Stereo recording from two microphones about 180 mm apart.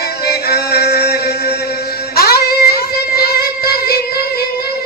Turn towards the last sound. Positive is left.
turn(degrees=60)  # may be behind; listen again after turning